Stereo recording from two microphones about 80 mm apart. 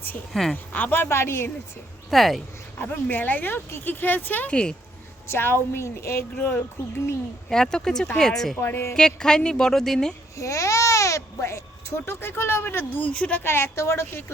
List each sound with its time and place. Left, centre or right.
0.5 s speech: left
2.0 s speech: centre
2.7 s speech: left
5.3 s speech: left
6.3 s speech: left
7.5 s speech: centre
8.6 s speech: left
9.0 s speech: centre
10.3 s speech: left; by 13.4 s centre
13.4 s speech: left